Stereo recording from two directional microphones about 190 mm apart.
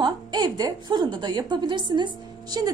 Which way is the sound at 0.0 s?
20° right (ahead or behind).